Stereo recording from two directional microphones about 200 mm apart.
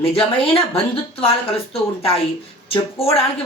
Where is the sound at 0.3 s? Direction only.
30° left (ahead or behind).